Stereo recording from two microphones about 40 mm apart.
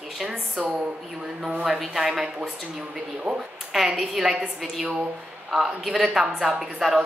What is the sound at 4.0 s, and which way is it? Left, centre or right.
A woman's voice, centre.